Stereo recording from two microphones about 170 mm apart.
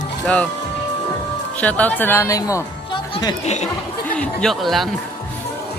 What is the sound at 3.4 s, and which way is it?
Speech, 40° left (ahead or behind).